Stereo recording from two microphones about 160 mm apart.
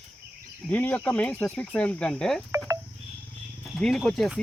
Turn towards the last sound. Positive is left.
turn(degrees=0)  # may be behind; listen again after turning